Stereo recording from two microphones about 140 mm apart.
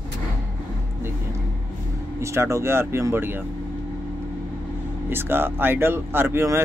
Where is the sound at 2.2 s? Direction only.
20° right (ahead or behind).